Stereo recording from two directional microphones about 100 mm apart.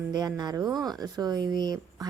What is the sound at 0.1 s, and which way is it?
A woman's voice, 45° right (ahead or behind).